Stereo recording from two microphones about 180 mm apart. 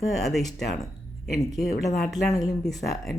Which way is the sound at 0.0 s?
Centre (ahead or behind).